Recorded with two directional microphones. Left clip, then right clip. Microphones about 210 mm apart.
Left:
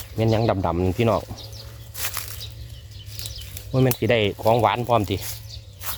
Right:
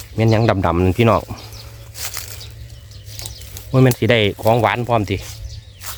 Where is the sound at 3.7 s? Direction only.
30° right (ahead or behind).